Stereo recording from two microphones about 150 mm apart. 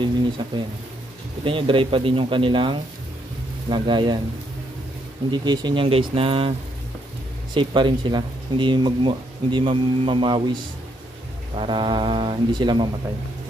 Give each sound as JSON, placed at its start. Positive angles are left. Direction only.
{"t": 0.4, "sound": "speech", "side_deg": -30}
{"t": 5.3, "sound": "speech", "side_deg": -30}
{"t": 7.5, "sound": "speech", "side_deg": -30}
{"t": 11.5, "sound": "speech", "side_deg": -35}